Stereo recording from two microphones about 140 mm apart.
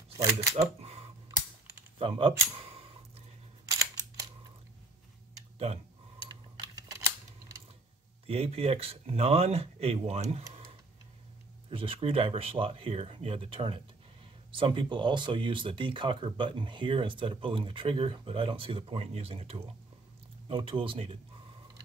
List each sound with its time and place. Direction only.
0.2 s speech: 20° right (ahead or behind)
2.0 s speech: 40° right (ahead or behind)
6.2 s a sound: 25° right (ahead or behind)
8.3 s speech: 45° right (ahead or behind)
11.7 s speech: 40° right (ahead or behind)